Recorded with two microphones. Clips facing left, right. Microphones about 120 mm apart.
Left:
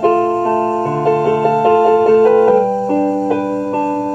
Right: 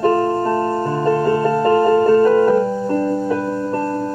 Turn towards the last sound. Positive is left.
turn(degrees=70)  # may be behind; listen again after turning